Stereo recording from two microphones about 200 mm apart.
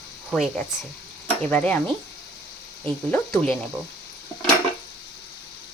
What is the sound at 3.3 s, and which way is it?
Speech, 5° left (ahead or behind).